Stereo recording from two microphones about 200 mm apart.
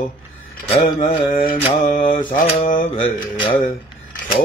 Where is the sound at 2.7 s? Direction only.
40° left (ahead or behind).